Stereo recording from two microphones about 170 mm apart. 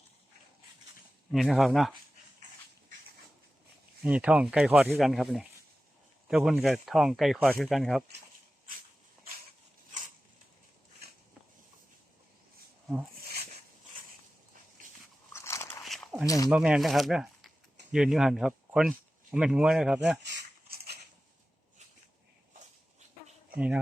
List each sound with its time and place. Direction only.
1.3 s speech: centre (ahead or behind)
4.0 s speech: 5° right (ahead or behind)
15.3 s biting: 15° left (ahead or behind)
15.8 s a sound: centre (ahead or behind)
16.2 s speech: 20° left (ahead or behind)
16.5 s speech: 5° right (ahead or behind)
23.6 s speech: 5° right (ahead or behind)